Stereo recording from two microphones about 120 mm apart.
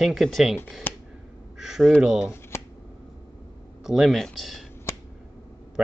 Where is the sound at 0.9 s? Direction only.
15° left (ahead or behind).